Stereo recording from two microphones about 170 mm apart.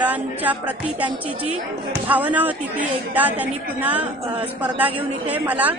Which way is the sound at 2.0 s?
10° right (ahead or behind).